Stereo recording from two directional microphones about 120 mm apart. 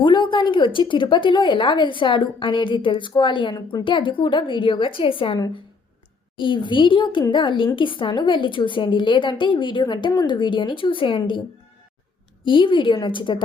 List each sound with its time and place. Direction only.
0.0 s a woman's voice: 45° left (ahead or behind)
12.5 s a woman's voice: 45° left (ahead or behind)